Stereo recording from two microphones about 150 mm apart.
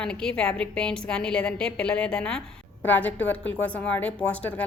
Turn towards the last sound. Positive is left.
turn(degrees=10)  # may be behind; listen again after turning